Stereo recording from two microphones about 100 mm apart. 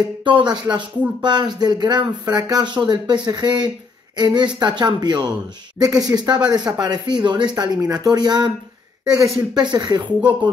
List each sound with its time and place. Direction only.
0.2 s speech: 55° right (ahead or behind)
9.6 s speech: 45° right (ahead or behind)